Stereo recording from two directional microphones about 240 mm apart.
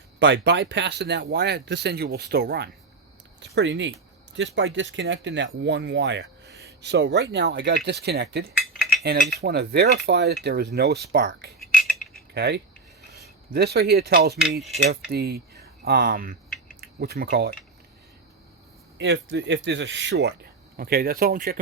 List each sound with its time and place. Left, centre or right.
0.2 s speech: right
8.6 s cutlery: centre
9.4 s speech: right
11.7 s a sound: centre
12.3 s speech: right
18.9 s speech: right